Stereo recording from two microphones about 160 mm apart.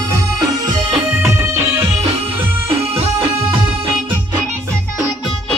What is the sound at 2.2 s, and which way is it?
Music, 35° right (ahead or behind).